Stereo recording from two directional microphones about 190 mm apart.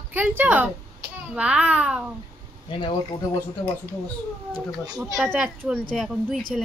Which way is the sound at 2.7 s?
25° left (ahead or behind).